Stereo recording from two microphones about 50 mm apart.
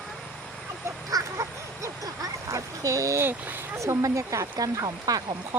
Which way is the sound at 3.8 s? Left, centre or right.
Right.